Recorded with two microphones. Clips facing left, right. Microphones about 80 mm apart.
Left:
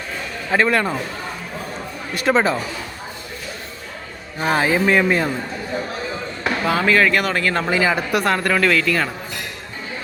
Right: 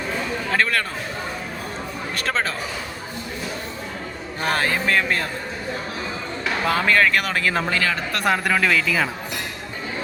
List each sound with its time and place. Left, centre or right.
0.5 s speech: centre
2.1 s speech: centre
4.4 s speech: centre
6.7 s speech: centre
7.7 s speech: centre
8.2 s speech: centre